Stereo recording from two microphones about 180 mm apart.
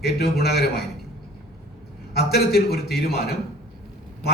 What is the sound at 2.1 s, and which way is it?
A man's voice, 60° left (ahead or behind).